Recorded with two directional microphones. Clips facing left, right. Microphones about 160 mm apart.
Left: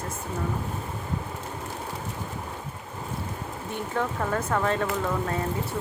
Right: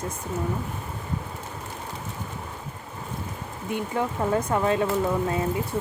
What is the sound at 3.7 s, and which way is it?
Speech, 15° right (ahead or behind).